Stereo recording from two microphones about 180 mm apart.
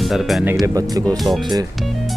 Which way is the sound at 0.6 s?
20° right (ahead or behind).